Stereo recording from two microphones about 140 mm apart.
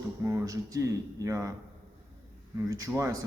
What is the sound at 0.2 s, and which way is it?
Speech, 25° right (ahead or behind).